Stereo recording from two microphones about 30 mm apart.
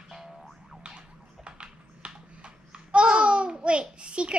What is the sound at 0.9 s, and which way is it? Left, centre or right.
Typing, right.